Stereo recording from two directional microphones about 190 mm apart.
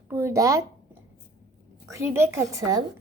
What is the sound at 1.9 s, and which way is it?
Speech, 15° right (ahead or behind).